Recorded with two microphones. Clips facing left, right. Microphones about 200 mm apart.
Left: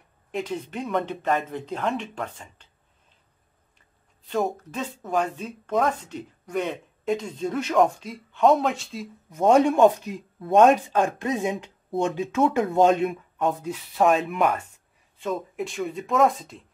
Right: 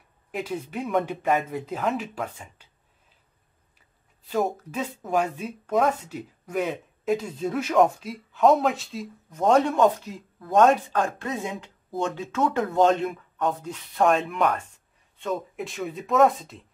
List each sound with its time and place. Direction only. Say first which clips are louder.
0.3 s speech: left 1 dB; 5° right (ahead or behind)
4.3 s speech: even; 5° right (ahead or behind)
9.8 s speech: left 3 dB; 20° left (ahead or behind)
13.5 s speech: left 2 dB; 5° left (ahead or behind)